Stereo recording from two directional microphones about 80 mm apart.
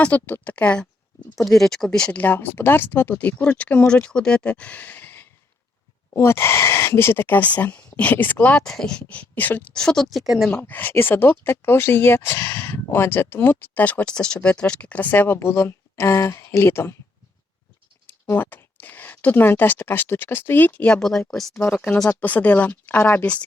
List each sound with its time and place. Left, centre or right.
0.0 s speech: centre
1.4 s speech: centre
2.1 s speech: left; by 10.5 s centre
10.6 s speech: left
18.0 s speech: left
21.0 s speech: centre
21.7 s speech: centre